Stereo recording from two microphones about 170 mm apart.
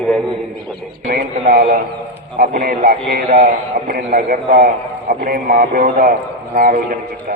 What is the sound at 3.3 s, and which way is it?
A man's voice, 50° right (ahead or behind).